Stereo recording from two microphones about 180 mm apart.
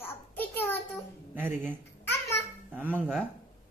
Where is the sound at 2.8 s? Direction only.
10° right (ahead or behind).